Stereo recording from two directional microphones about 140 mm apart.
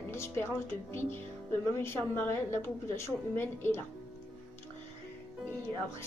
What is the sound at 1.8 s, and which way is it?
A woman's voice, 15° left (ahead or behind).